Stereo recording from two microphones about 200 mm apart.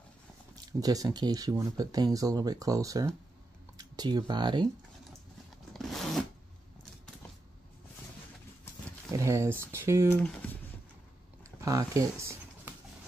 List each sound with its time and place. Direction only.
0.7 s speech: 20° right (ahead or behind)
5.7 s zipper: centre (ahead or behind)
9.1 s speech: 15° right (ahead or behind)
10.0 s speech: 10° left (ahead or behind)
11.4 s a sound: 15° right (ahead or behind)